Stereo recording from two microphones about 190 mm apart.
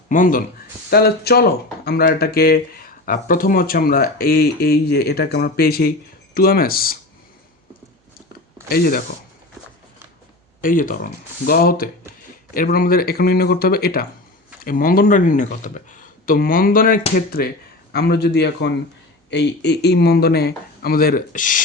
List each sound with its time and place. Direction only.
0.1 s speech: 45° left (ahead or behind)
8.7 s speech: 50° left (ahead or behind)
10.6 s speech: 45° left (ahead or behind)